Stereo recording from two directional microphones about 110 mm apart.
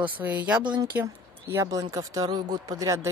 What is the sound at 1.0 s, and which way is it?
Speech, 25° right (ahead or behind).